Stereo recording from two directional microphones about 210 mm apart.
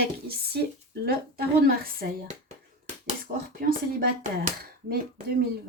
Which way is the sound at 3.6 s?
45° right (ahead or behind).